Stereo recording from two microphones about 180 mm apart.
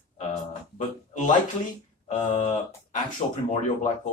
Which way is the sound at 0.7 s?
45° left (ahead or behind).